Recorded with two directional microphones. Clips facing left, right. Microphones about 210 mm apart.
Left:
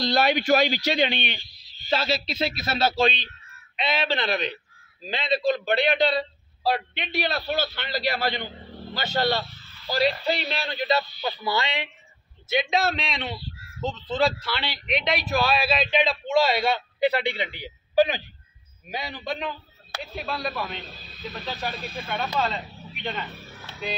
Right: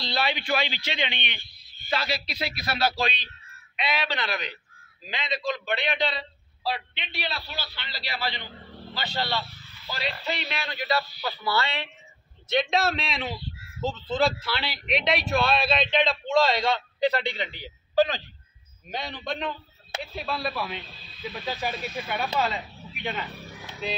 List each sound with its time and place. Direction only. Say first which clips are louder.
0.0 s a man's voice: left 7 dB; 45° left (ahead or behind)
1.4 s a sound: left 1 dB; 55° right (ahead or behind)
1.9 s a man's voice: left 4 dB; 25° left (ahead or behind)
12.4 s a man's voice: even; centre (ahead or behind)
20.8 s a man's voice: even; 45° left (ahead or behind)
21.5 s speech: right 2 dB; 10° right (ahead or behind)
21.7 s speech: right 1 dB; 30° left (ahead or behind)
22.0 s speech: left 1 dB; 5° right (ahead or behind)